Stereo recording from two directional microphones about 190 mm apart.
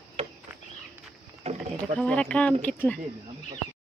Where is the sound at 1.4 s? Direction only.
35° right (ahead or behind).